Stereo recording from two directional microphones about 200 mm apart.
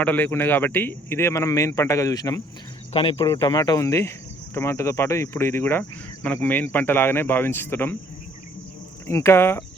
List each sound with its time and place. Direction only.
0.0 s speech: 10° left (ahead or behind)
9.0 s speech: 15° left (ahead or behind)